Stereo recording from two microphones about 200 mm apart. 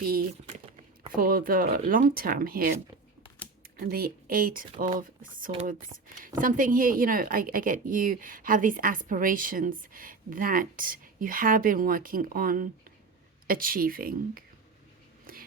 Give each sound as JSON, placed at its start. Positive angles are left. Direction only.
{"t": 0.0, "sound": "speech", "side_deg": -45}
{"t": 3.8, "sound": "speech", "side_deg": -50}